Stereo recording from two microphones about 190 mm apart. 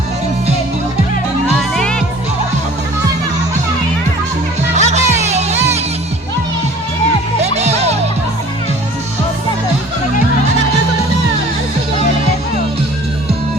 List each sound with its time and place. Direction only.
1.5 s music: 5° left (ahead or behind)
4.7 s music: 35° right (ahead or behind)
7.5 s music: 35° right (ahead or behind)